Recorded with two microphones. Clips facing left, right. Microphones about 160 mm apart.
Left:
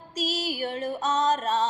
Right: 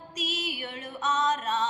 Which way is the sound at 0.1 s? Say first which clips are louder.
Left 5 dB; 35° left (ahead or behind).